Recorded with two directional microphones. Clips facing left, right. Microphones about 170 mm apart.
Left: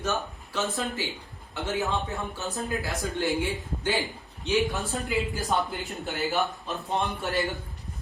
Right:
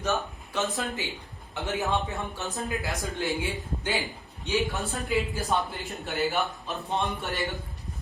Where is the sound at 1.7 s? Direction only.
20° right (ahead or behind).